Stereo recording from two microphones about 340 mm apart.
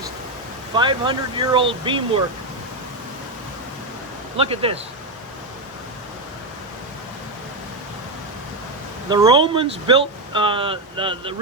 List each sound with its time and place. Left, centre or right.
0.7 s speech: centre
4.4 s speech: centre
9.0 s speech: centre